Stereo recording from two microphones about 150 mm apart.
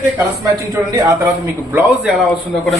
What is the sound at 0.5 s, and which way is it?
Speech, 25° right (ahead or behind).